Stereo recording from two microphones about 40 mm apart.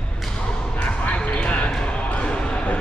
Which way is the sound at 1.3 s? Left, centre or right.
Left.